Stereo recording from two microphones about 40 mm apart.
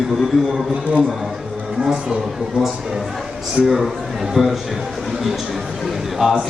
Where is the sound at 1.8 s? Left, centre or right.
Centre.